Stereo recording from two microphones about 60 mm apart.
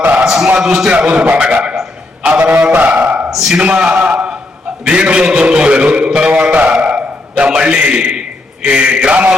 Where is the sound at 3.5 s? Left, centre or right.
Centre.